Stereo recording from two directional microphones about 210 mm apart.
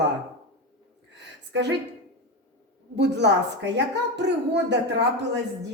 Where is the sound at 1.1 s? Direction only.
55° right (ahead or behind).